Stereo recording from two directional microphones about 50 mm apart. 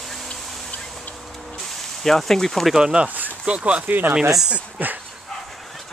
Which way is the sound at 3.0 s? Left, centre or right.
Right.